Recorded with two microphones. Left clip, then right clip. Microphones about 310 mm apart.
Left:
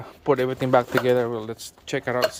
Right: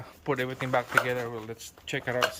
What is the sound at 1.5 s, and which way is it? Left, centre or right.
Speech, left.